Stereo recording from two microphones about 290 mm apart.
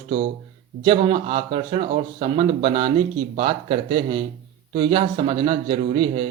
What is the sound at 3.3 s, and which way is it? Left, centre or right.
Speech, right.